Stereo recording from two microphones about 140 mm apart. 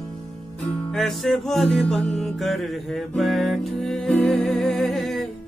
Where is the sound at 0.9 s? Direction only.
Centre (ahead or behind).